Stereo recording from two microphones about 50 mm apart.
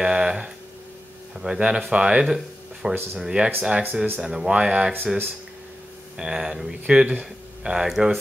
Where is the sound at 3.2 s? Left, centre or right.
Centre.